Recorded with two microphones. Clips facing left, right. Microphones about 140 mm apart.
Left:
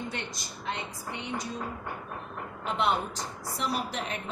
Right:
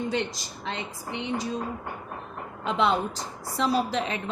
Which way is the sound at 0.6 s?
90° right.